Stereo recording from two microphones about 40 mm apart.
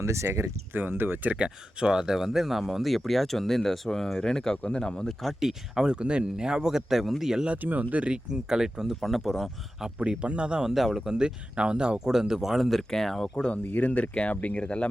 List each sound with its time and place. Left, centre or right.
0.3 s speech: right
1.4 s speech: centre
4.5 s speech: left
4.8 s speech: left
5.4 s speech: centre
7.0 s speech: centre
7.6 s speech: right
8.3 s speech: centre
9.0 s speech: centre
10.0 s speech: right
10.6 s speech: centre
12.9 s speech: centre
13.3 s speech: left
13.7 s speech: left